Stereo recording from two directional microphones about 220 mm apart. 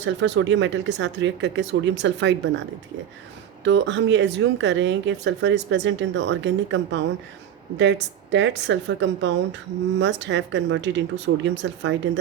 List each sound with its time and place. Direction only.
0.0 s speech: 55° right (ahead or behind)
3.6 s speech: 55° right (ahead or behind)